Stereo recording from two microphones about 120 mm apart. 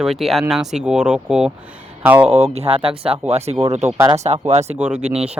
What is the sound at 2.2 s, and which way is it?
Speech, 60° right (ahead or behind).